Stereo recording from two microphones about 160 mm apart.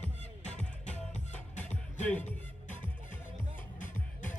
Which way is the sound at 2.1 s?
10° left (ahead or behind).